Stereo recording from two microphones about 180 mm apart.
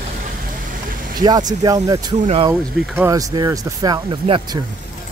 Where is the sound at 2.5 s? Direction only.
Centre (ahead or behind).